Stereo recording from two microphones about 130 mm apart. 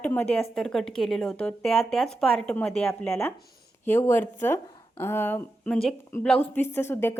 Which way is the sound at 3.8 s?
20° left (ahead or behind).